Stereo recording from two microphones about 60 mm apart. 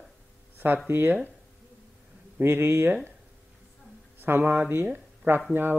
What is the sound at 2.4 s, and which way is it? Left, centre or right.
Speech, right.